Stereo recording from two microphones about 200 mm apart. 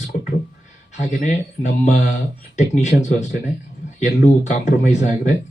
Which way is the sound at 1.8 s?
35° left (ahead or behind).